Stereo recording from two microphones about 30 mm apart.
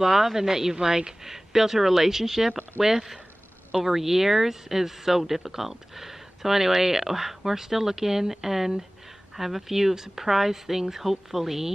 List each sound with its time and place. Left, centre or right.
0.0 s speech: centre
1.2 s speech: centre